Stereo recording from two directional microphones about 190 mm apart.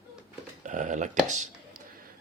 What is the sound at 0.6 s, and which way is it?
Speech, 40° right (ahead or behind).